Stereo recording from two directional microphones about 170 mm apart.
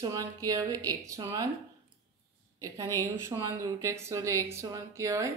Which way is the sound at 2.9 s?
15° right (ahead or behind).